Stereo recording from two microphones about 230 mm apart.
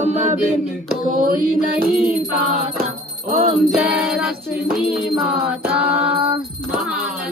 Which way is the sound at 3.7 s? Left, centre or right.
Centre.